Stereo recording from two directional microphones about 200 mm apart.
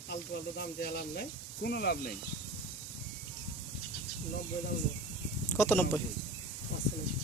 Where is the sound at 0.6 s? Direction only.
50° left (ahead or behind).